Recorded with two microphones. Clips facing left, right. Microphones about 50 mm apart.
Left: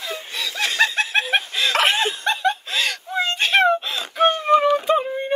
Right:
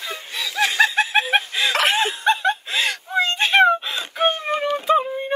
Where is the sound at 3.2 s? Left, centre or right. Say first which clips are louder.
Right 2 dB; centre.